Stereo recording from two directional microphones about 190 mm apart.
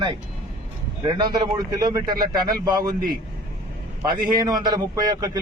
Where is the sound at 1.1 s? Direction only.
20° right (ahead or behind).